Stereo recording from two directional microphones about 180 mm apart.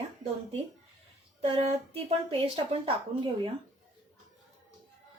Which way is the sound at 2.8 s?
30° right (ahead or behind).